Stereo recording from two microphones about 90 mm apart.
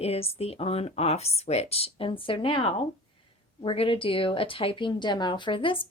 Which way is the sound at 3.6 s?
80° left.